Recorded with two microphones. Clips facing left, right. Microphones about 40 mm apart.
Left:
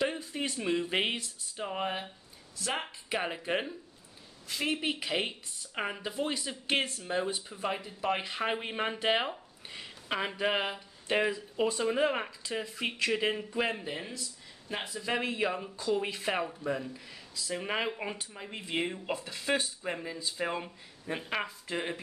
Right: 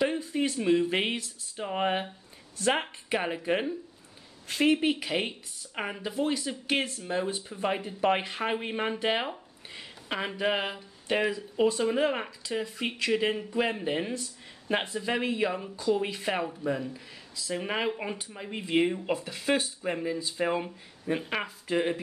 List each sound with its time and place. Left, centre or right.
0.0 s a sound: centre
0.6 s speech: centre
1.8 s speech: right
3.1 s speech: centre
4.5 s a woman's voice: right
4.8 s speech: centre
7.3 s speech: centre
7.8 s speech: right
8.2 s speech: centre
13.8 s speech: right
15.0 s speech: centre